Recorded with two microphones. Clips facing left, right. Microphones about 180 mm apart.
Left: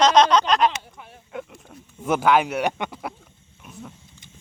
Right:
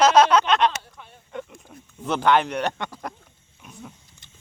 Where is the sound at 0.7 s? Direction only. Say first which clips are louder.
Left 1 dB; 15° left (ahead or behind).